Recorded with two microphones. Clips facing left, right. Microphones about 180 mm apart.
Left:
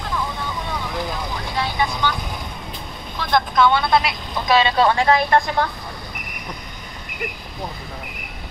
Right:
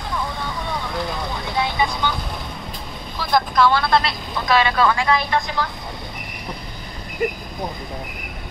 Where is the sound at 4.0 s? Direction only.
20° left (ahead or behind); by 5.7 s 45° left (ahead or behind).